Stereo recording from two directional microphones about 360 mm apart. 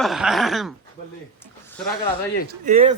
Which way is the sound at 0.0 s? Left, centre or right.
Centre.